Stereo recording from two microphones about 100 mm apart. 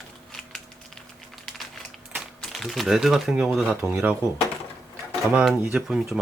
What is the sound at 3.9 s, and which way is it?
Speech, 20° right (ahead or behind).